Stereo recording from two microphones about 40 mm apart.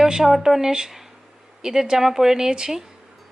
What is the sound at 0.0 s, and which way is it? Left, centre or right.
Speech, centre.